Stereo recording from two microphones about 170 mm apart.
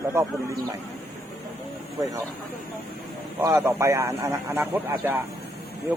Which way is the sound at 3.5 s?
15° right (ahead or behind).